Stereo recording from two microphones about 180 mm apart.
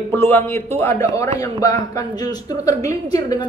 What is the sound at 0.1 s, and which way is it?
A man's voice, 15° left (ahead or behind).